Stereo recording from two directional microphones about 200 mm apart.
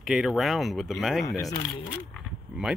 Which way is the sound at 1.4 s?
20° left (ahead or behind).